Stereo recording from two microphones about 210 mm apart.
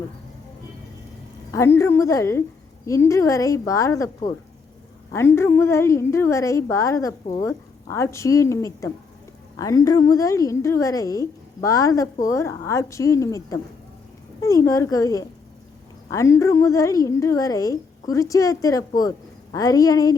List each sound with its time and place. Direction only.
1.5 s a woman's voice: 10° left (ahead or behind)